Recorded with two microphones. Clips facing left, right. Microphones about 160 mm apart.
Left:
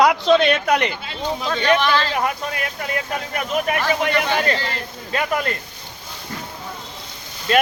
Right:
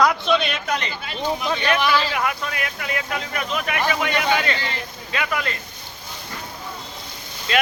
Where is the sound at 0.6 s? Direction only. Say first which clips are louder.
Left 7 dB; 60° left (ahead or behind).